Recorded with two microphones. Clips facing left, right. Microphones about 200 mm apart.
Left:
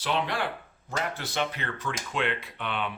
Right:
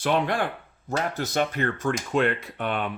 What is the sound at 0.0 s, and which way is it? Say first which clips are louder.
Speech: right 5 dB; 50° right (ahead or behind).